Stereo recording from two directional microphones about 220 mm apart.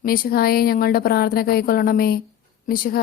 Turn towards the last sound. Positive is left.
turn(degrees=40)  # may be behind; listen again after turning